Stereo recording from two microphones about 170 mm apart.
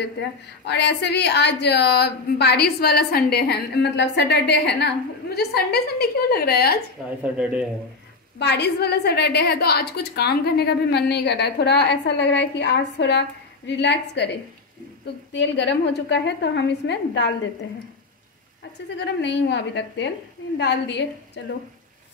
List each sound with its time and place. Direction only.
0.7 s a woman's voice: 85° left; by 6.8 s 65° left (ahead or behind)
7.2 s a man's voice: 5° right (ahead or behind)
8.4 s a woman's voice: 80° left
15.3 s a woman's voice: 90° left
18.9 s a woman's voice: 90° left